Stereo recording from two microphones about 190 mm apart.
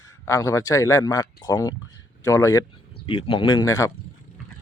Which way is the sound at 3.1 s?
25° left (ahead or behind).